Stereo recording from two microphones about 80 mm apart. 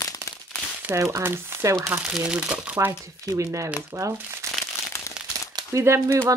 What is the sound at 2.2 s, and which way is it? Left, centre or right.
Speech, centre.